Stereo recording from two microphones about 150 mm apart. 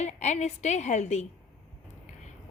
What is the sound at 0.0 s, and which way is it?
A woman's voice, 50° left (ahead or behind).